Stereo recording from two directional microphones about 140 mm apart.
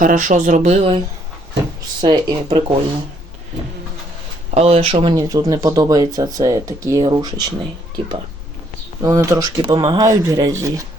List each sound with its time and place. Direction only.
0.0 s speech: 70° right (ahead or behind); by 1.0 s 45° right (ahead or behind)
2.0 s speech: 35° right (ahead or behind)
4.5 s speech: 45° right (ahead or behind)
5.1 s speech: 25° right (ahead or behind)
9.0 s speech: 25° right (ahead or behind)